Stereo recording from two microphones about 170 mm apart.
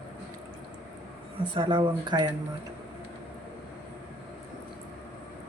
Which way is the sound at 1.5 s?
30° right (ahead or behind).